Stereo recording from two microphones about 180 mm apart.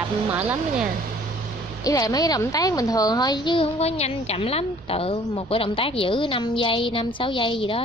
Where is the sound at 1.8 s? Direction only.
20° left (ahead or behind).